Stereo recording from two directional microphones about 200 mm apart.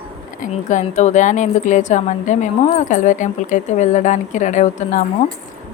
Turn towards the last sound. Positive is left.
turn(degrees=35)  # may be behind; listen again after turning